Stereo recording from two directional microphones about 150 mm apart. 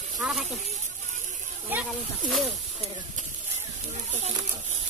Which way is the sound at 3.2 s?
50° right (ahead or behind).